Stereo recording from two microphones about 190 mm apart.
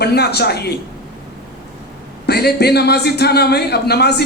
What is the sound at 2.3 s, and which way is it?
A man's voice, 55° left (ahead or behind).